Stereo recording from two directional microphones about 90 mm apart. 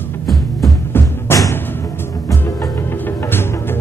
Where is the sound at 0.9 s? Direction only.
25° left (ahead or behind).